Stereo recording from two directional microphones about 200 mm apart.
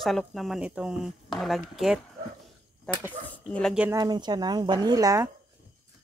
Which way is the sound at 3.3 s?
5° left (ahead or behind).